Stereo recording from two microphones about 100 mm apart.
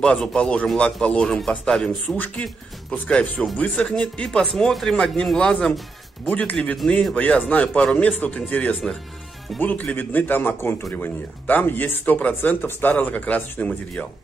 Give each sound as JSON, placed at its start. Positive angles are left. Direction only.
{"t": 0.0, "sound": "a man's voice", "side_deg": 10}